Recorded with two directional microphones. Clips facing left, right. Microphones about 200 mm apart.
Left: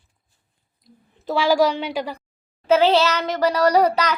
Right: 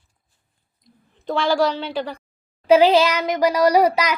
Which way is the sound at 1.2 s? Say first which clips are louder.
Left 1 dB; 5° left (ahead or behind).